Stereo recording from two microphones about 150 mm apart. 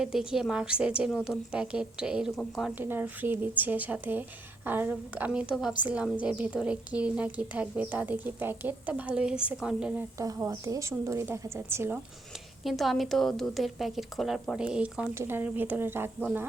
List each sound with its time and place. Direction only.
0.0 s speech: 5° right (ahead or behind)
2.7 s a woman's voice: 15° right (ahead or behind)
10.2 s a woman's voice: 20° right (ahead or behind)
12.6 s a woman's voice: centre (ahead or behind)